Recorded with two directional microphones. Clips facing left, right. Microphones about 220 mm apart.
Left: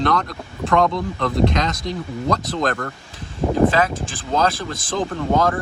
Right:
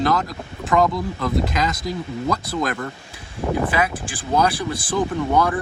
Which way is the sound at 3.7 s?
15° right (ahead or behind).